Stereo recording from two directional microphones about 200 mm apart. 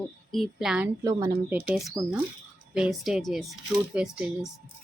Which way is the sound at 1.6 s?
Centre (ahead or behind).